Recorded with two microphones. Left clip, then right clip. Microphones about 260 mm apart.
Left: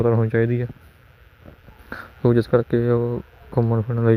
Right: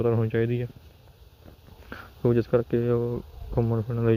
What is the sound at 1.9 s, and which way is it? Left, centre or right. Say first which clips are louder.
Speech: left 5 dB; left.